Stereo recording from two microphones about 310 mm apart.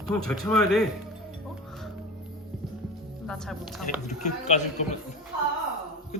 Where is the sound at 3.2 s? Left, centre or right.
Centre.